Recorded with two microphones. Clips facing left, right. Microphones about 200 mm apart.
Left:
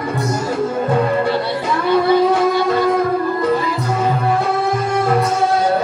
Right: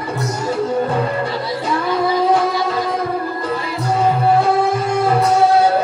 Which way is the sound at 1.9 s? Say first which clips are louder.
Left 3 dB; 65° left (ahead or behind).